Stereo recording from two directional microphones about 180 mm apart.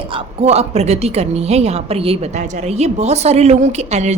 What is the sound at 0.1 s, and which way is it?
A woman's voice, 35° right (ahead or behind).